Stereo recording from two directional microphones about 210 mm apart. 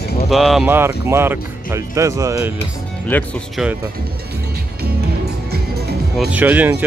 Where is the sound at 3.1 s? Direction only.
10° left (ahead or behind).